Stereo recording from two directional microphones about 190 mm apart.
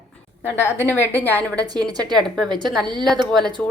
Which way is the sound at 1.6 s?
20° right (ahead or behind).